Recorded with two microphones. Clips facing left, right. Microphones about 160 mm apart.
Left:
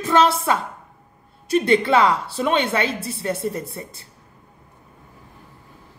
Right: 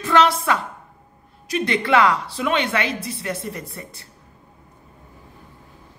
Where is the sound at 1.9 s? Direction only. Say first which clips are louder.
Even; 25° left (ahead or behind).